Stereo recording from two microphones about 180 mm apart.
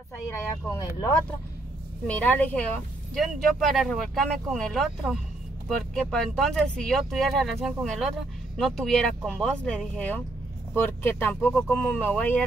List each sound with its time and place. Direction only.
0.3 s speech: 20° left (ahead or behind)